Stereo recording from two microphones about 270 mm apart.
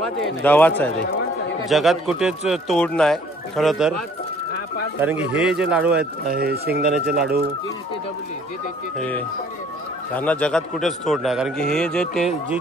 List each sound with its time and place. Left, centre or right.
0.4 s a man's voice: centre
5.0 s a man's voice: centre
6.3 s speech: right
6.8 s a man's voice: centre
10.1 s a man's voice: centre